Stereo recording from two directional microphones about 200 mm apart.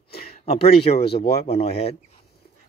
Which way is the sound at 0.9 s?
50° left (ahead or behind).